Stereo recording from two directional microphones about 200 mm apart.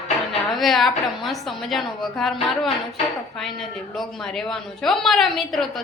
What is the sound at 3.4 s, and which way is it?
A woman's voice, centre (ahead or behind).